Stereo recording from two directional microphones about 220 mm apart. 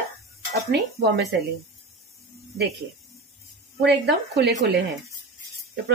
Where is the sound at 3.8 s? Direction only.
50° right (ahead or behind).